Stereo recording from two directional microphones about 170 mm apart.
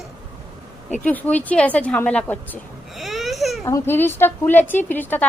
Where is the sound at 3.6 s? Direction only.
15° left (ahead or behind).